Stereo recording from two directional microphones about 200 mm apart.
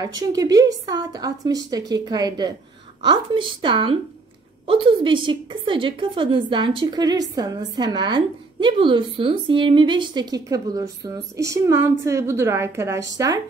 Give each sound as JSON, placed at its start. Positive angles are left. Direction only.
{"t": 0.0, "sound": "a woman's voice", "side_deg": -20}